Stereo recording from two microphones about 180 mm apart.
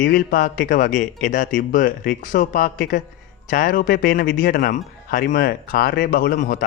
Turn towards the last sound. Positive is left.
turn(degrees=50)  # may be behind; listen again after turning